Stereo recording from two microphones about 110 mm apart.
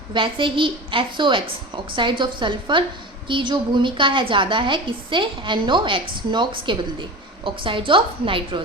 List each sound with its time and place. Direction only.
0.1 s a woman's voice: 50° right (ahead or behind)